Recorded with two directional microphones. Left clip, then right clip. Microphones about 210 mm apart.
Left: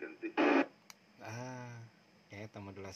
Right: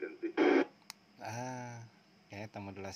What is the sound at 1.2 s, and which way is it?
Speech, 25° right (ahead or behind).